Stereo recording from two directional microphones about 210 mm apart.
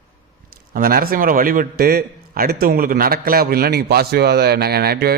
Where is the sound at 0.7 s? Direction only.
45° right (ahead or behind).